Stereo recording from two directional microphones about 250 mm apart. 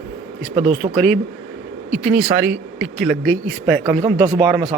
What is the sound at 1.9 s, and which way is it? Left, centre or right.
Speech, centre.